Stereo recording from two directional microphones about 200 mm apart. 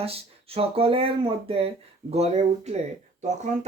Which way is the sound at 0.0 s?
30° right (ahead or behind).